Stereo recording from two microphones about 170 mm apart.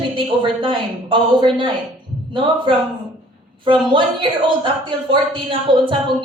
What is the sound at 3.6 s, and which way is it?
A woman's voice, 30° right (ahead or behind).